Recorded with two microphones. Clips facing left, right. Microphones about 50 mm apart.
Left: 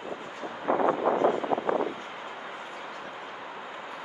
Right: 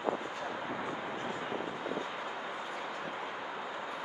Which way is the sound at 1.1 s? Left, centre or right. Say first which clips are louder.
Left 12 dB; left.